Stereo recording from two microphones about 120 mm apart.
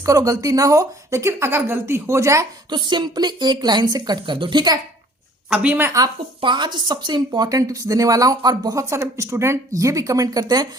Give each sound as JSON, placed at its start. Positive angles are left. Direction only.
{"t": 0.0, "sound": "speech", "side_deg": -30}
{"t": 2.6, "sound": "speech", "side_deg": -40}
{"t": 5.5, "sound": "speech", "side_deg": -10}
{"t": 6.0, "sound": "speech", "side_deg": -40}